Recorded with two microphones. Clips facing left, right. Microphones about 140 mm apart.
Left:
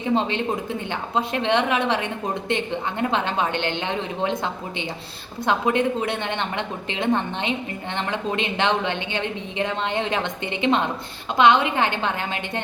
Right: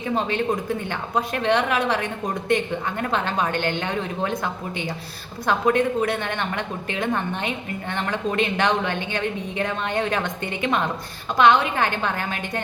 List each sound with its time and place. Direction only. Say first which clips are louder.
0.0 s a woman's voice: left 1 dB; 20° left (ahead or behind)
5.5 s a woman's voice: right 1 dB; 20° left (ahead or behind)